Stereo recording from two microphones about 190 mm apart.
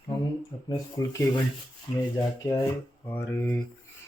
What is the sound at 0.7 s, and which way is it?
Speech, 20° left (ahead or behind).